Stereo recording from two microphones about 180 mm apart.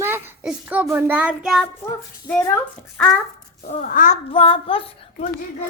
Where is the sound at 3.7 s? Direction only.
50° left (ahead or behind).